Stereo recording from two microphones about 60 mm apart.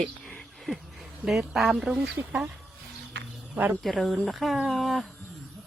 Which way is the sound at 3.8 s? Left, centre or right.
Centre.